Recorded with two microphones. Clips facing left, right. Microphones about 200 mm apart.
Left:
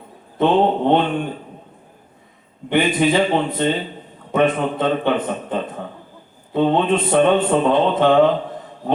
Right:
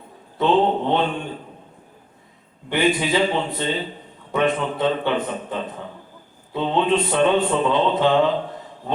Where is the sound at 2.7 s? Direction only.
55° left (ahead or behind).